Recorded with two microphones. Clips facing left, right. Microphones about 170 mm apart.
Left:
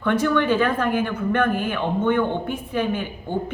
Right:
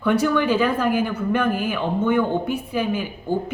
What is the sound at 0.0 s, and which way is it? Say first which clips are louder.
Speech: right 1 dB; 10° right (ahead or behind).